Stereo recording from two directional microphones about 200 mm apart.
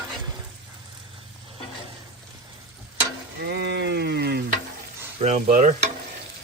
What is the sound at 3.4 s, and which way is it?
Frying, 55° right (ahead or behind).